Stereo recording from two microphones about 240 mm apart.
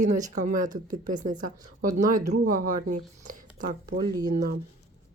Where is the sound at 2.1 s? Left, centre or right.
Right.